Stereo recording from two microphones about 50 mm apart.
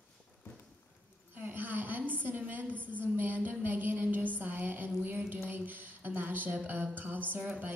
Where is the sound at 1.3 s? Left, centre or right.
Right.